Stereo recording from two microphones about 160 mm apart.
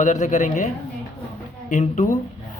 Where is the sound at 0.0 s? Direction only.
50° left (ahead or behind).